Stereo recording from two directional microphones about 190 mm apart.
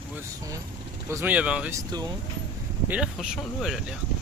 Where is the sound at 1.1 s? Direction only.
10° right (ahead or behind).